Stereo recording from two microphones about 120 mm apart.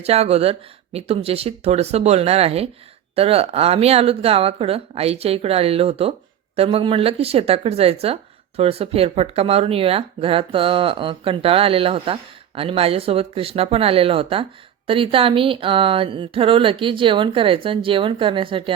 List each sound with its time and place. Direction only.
0.0 s speech: 60° right (ahead or behind)